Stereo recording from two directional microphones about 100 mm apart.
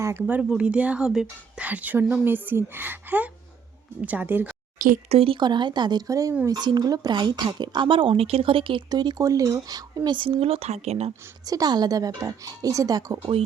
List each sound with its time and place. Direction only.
0.0 s speech: 25° right (ahead or behind)
5.0 s speech: 80° right
5.4 s speech: 50° right (ahead or behind)
6.6 s speech: 45° right (ahead or behind); by 8.8 s 60° right (ahead or behind)
8.9 s speech: 45° right (ahead or behind); by 11.1 s 90° right
11.4 s speech: 40° right (ahead or behind)